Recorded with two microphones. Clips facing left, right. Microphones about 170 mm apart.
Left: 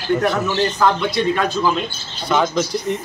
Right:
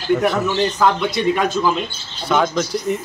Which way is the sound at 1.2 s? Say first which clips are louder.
Right 1 dB; 15° right (ahead or behind).